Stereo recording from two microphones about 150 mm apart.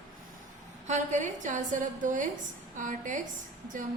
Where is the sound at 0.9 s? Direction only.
55° right (ahead or behind).